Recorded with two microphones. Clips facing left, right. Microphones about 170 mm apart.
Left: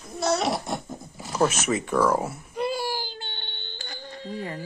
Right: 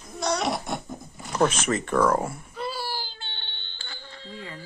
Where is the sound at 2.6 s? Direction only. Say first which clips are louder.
Left 5 dB; 15° left (ahead or behind).